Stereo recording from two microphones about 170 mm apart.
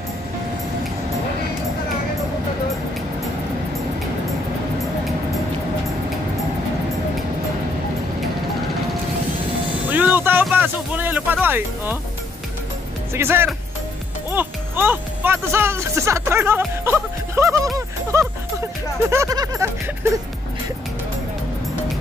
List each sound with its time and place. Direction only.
9.8 s vehicle: 10° right (ahead or behind)
10.4 s speech: 10° right (ahead or behind)
13.1 s speech: 15° right (ahead or behind)
19.0 s music: 20° right (ahead or behind)